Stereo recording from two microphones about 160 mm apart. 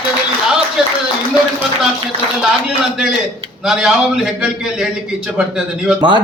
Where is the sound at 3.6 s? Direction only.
5° right (ahead or behind).